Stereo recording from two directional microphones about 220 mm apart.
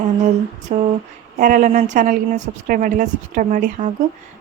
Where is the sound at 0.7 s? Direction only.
30° right (ahead or behind).